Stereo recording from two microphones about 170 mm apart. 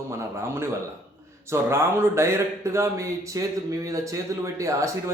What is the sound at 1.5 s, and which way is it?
A man's voice, 15° right (ahead or behind).